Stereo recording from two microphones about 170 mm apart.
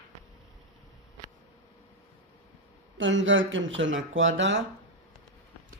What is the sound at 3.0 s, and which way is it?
Speech, 90° right.